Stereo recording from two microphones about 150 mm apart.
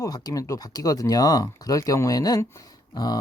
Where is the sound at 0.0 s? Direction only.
25° left (ahead or behind).